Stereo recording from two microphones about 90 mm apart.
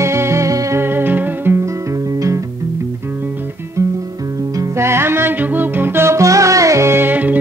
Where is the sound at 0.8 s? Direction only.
25° right (ahead or behind).